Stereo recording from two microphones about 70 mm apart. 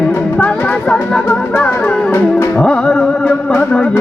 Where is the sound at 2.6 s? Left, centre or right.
Centre.